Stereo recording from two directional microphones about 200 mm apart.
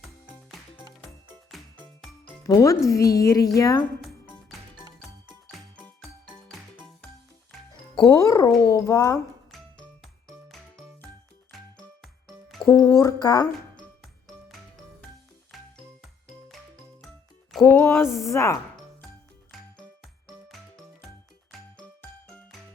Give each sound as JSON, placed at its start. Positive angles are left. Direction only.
{"t": 1.8, "sound": "music", "side_deg": 0}
{"t": 2.4, "sound": "speech", "side_deg": 15}
{"t": 4.3, "sound": "music", "side_deg": 10}
{"t": 7.9, "sound": "speech", "side_deg": 20}
{"t": 11.5, "sound": "music", "side_deg": 0}
{"t": 12.7, "sound": "speech", "side_deg": 15}
{"t": 15.5, "sound": "music", "side_deg": 0}
{"t": 17.6, "sound": "speech", "side_deg": 10}
{"t": 21.5, "sound": "music", "side_deg": 0}